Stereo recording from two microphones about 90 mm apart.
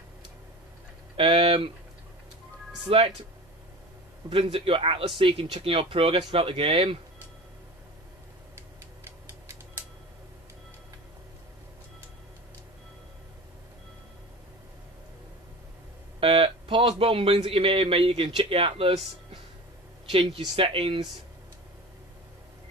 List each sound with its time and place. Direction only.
1.1 s speech: 90° right
2.9 s speech: 90° right
4.3 s speech: 75° right (ahead or behind); by 7.0 s 90° right
16.2 s hum: 85° right
17.0 s speech: 90° right
20.1 s speech: 90° right